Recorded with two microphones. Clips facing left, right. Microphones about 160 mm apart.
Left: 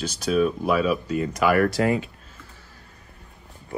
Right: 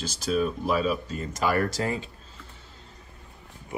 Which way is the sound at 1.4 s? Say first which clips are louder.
Left 5 dB; 35° right (ahead or behind).